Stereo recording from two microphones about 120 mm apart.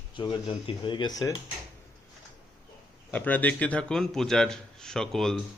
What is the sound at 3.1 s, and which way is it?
A man's voice, 15° left (ahead or behind).